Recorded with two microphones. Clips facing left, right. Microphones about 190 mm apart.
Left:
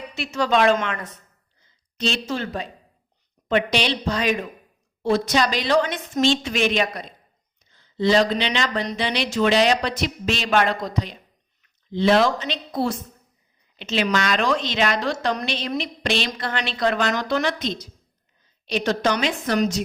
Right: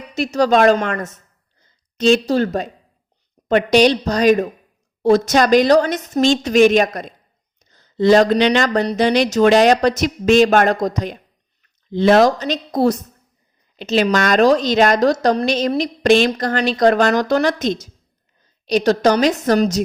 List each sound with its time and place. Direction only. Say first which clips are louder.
0.1 s a woman's voice: right 7 dB; 40° right (ahead or behind)